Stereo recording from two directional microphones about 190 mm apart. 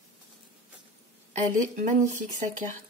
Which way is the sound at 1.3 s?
40° right (ahead or behind).